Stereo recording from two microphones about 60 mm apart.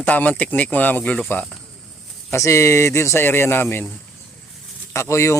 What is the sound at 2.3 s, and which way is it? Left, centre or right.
Speech, left.